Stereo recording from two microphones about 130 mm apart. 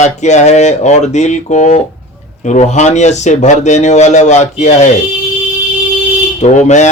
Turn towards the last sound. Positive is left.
turn(degrees=65)  # may be behind; listen again after turning